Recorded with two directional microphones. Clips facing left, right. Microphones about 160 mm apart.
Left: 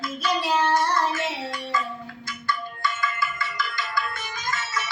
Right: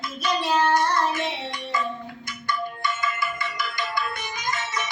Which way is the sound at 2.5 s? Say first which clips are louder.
Right 1 dB; 20° right (ahead or behind).